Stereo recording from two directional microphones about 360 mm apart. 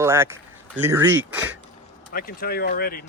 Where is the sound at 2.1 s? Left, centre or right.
Left.